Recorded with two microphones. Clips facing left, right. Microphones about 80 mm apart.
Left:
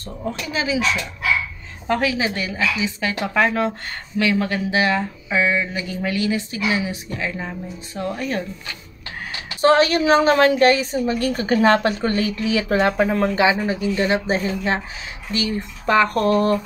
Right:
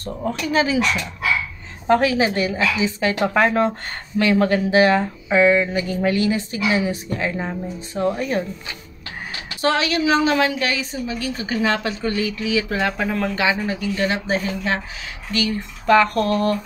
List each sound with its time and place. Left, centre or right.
0.0 s speech: right
1.9 s speech: right
9.6 s a woman's voice: left